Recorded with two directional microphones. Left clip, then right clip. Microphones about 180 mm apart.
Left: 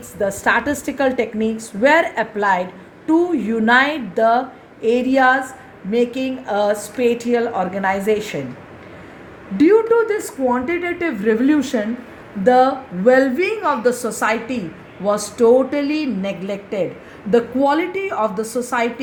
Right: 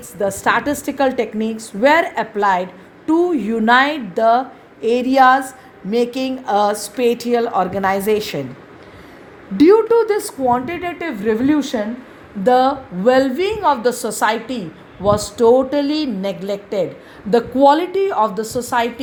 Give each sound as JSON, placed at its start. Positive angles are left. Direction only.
{"t": 0.2, "sound": "a woman's voice", "side_deg": -60}
{"t": 9.6, "sound": "speech", "side_deg": -65}
{"t": 12.4, "sound": "speech", "side_deg": -45}